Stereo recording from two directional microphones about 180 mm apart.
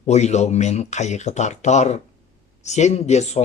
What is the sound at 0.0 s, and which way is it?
Speech, 40° left (ahead or behind).